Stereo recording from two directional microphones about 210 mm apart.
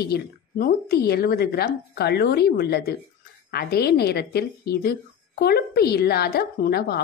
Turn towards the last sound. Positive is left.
turn(degrees=50)  # may be behind; listen again after turning